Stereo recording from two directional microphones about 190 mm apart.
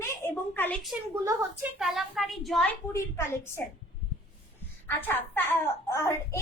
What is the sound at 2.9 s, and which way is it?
Speech, 15° left (ahead or behind).